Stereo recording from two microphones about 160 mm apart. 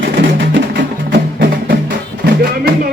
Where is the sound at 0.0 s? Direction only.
90° right.